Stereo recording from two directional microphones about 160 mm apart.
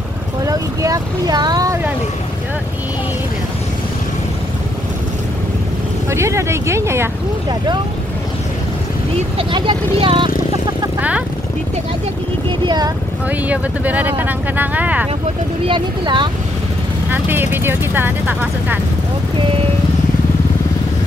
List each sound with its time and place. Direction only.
0.5 s speech: 20° right (ahead or behind)
6.0 s speech: 15° right (ahead or behind)
9.4 s speech: 30° right (ahead or behind)
11.0 s vehicle: 10° right (ahead or behind)
12.4 s speech: 25° right (ahead or behind)
13.5 s speech: 10° right (ahead or behind)
15.6 s speech: 30° right (ahead or behind)
17.1 s speech: 15° right (ahead or behind)